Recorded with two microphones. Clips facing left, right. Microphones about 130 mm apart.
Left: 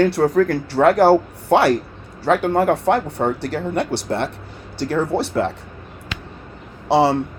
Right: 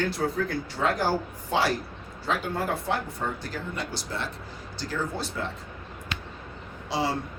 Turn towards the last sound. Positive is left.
turn(degrees=70)  # may be behind; listen again after turning